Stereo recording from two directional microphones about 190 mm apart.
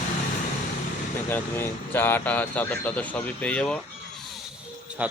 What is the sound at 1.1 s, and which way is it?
Speech, 10° left (ahead or behind).